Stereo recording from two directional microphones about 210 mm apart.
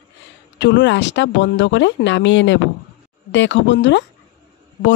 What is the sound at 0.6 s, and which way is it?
Speech, 55° left (ahead or behind).